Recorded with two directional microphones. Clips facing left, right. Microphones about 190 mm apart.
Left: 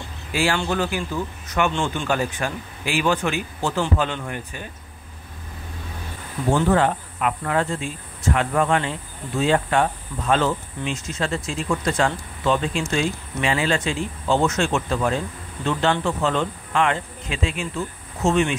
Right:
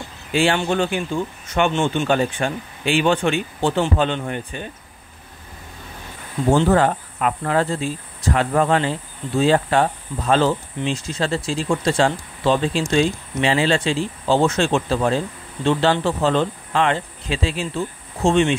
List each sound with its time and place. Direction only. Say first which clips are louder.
0.3 s speech: right 4 dB; 25° right (ahead or behind)
6.7 s speech: right 2 dB; 40° right (ahead or behind)